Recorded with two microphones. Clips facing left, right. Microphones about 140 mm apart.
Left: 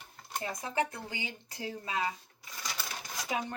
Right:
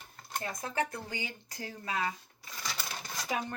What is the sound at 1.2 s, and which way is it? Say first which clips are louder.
Speech: even; 25° left (ahead or behind).